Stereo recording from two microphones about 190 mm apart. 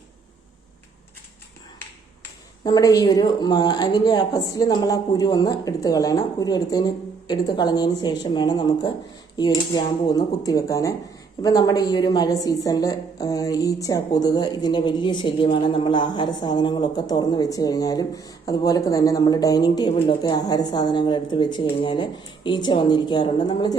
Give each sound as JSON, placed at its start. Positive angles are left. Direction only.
{"t": 2.6, "sound": "a man's voice", "side_deg": 20}